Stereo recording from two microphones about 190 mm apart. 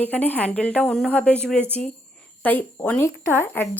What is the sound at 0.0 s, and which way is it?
A woman's voice, 10° left (ahead or behind).